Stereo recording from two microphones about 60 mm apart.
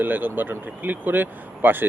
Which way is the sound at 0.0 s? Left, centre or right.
Right.